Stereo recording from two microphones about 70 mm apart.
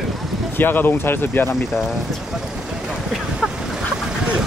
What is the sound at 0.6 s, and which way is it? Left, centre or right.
Speech, left.